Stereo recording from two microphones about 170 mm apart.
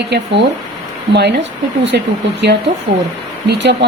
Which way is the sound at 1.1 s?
90° right.